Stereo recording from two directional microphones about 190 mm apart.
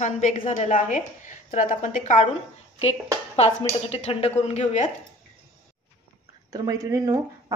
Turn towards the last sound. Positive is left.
turn(degrees=-15)  # may be behind; listen again after turning